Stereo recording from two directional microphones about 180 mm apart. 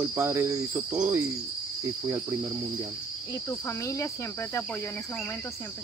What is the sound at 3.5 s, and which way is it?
Speech, 15° left (ahead or behind).